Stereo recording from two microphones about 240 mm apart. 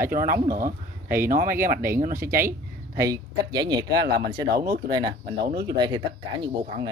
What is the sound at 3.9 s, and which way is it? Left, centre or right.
Speech, right.